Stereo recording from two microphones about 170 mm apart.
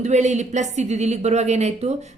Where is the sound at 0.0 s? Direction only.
45° right (ahead or behind).